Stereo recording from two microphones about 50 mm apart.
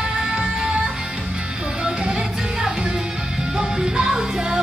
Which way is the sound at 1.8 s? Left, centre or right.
Centre.